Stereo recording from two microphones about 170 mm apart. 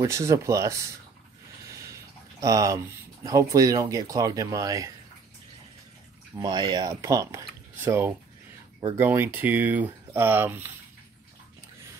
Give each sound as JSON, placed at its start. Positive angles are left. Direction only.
{"t": 0.0, "sound": "speech", "side_deg": -15}
{"t": 1.7, "sound": "a sound", "side_deg": -15}
{"t": 2.4, "sound": "speech", "side_deg": -20}
{"t": 6.3, "sound": "speech", "side_deg": -25}